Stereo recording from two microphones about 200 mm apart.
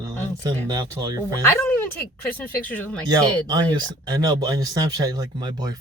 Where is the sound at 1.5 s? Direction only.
10° left (ahead or behind).